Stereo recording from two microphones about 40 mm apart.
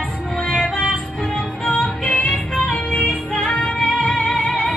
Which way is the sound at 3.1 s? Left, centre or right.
Centre.